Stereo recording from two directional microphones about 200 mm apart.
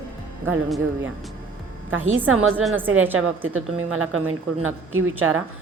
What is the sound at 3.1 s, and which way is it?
A woman's voice, 90° right.